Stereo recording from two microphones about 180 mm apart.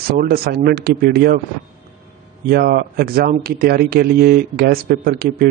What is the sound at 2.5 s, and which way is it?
A man's voice, 55° right (ahead or behind).